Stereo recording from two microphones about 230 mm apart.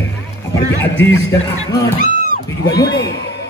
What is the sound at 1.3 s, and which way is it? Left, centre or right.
Speech, centre.